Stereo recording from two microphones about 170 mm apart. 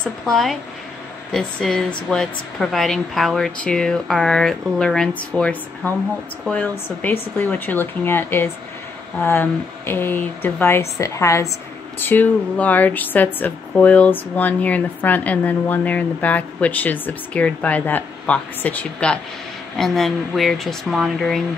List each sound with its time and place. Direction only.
0.0 s speech: centre (ahead or behind)